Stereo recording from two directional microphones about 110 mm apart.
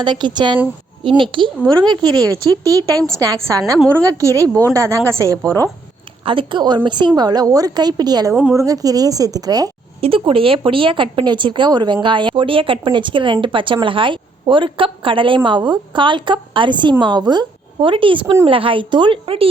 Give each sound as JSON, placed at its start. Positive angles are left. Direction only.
{"t": 0.0, "sound": "a woman's voice", "side_deg": -45}
{"t": 6.2, "sound": "speech", "side_deg": -50}
{"t": 8.3, "sound": "a woman's voice", "side_deg": -5}
{"t": 8.5, "sound": "speech", "side_deg": -35}
{"t": 10.0, "sound": "speech", "side_deg": -55}